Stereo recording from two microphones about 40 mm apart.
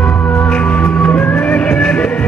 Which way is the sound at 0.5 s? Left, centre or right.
Left.